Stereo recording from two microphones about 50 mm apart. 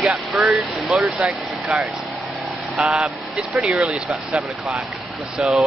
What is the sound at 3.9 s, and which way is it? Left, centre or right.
Speech, centre.